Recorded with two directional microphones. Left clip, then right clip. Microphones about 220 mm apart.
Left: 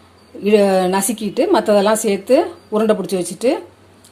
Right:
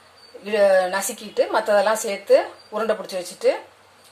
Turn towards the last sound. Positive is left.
turn(degrees=20)  # may be behind; listen again after turning